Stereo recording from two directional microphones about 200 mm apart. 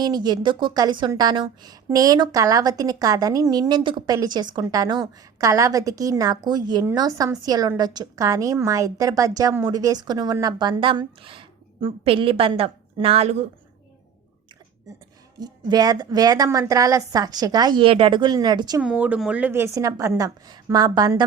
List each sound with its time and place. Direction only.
0.0 s speech: 20° right (ahead or behind)
15.4 s speech: 20° right (ahead or behind)
18.8 s a woman's voice: 5° right (ahead or behind)